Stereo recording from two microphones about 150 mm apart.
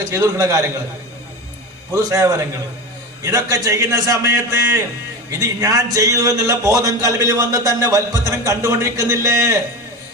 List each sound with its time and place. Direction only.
0.0 s speech: 20° right (ahead or behind)
1.9 s speech: 20° right (ahead or behind)